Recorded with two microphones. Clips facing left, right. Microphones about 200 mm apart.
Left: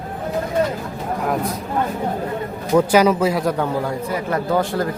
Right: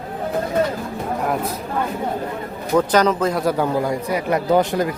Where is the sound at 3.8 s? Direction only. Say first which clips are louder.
Right 2 dB; 15° right (ahead or behind).